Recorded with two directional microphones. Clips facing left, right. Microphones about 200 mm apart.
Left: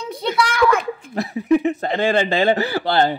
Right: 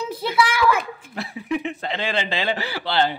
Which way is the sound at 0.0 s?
5° right (ahead or behind).